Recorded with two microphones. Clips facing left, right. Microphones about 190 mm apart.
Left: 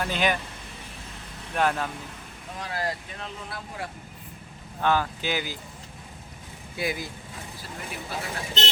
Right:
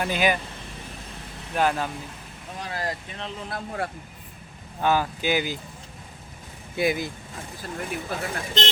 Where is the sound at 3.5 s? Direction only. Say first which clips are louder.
Right 9 dB; 50° right (ahead or behind).